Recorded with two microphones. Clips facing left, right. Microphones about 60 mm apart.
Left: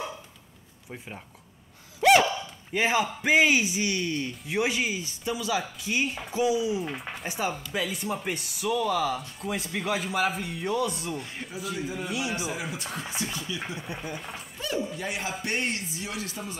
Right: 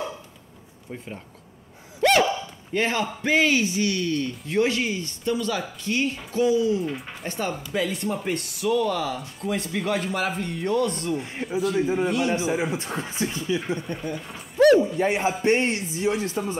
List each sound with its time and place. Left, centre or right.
2.0 s gasp: centre
2.7 s a man's voice: centre
12.4 s speech: right
13.7 s speech: centre
14.6 s a sound: right
15.0 s speech: right